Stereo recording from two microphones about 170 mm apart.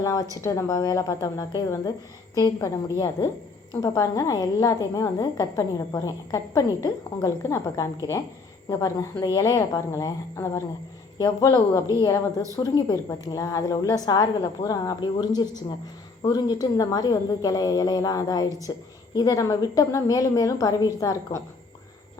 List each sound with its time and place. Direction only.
0.0 s a woman's voice: 20° left (ahead or behind)
3.8 s a woman's voice: 20° left (ahead or behind)